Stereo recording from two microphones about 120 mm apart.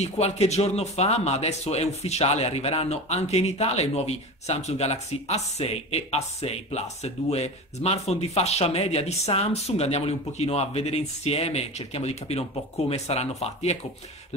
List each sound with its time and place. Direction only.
0.0 s speech: 65° left (ahead or behind)